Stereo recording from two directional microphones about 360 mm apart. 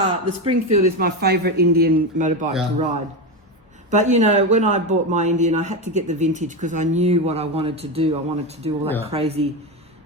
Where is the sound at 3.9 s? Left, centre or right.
Centre.